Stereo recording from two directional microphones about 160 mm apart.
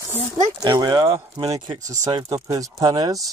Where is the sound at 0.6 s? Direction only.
25° right (ahead or behind).